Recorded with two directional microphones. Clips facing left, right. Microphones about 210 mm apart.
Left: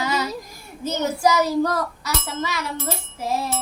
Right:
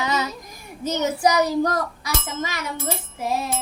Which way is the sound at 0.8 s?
20° right (ahead or behind).